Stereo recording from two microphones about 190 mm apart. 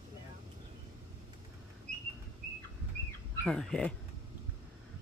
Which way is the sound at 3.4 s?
5° left (ahead or behind).